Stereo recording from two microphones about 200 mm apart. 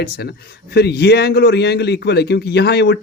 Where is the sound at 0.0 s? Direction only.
55° left (ahead or behind).